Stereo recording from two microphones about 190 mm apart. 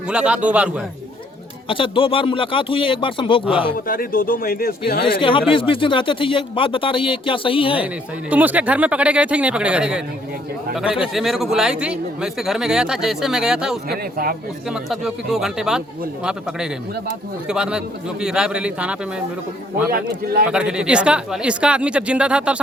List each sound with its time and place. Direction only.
0.1 s speech: 5° right (ahead or behind)
1.6 s speech: 25° left (ahead or behind)
3.8 s speech: 50° left (ahead or behind)
5.0 s speech: 25° left (ahead or behind)
8.3 s speech: 10° right (ahead or behind)
13.9 s a man's voice: 50° right (ahead or behind)
14.7 s speech: centre (ahead or behind)
17.5 s speech: 5° right (ahead or behind)
19.9 s a man's voice: 55° right (ahead or behind)
20.5 s speech: 5° right (ahead or behind)